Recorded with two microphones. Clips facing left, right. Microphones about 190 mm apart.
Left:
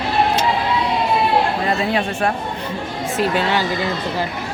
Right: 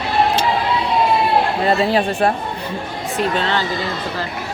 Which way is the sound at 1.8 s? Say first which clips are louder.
Right 3 dB; 35° right (ahead or behind).